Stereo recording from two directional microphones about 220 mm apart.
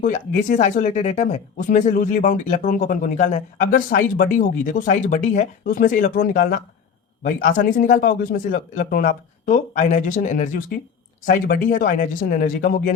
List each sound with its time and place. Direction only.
0.0 s speech: 35° left (ahead or behind)